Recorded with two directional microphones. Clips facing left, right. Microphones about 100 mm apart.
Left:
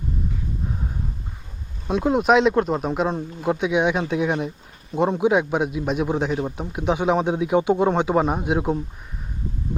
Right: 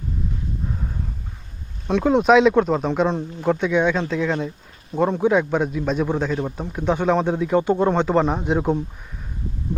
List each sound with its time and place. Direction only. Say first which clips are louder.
1.9 s a man's voice: right 2 dB; 5° left (ahead or behind)